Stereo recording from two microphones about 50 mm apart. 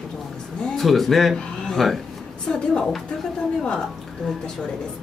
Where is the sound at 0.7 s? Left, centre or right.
Centre.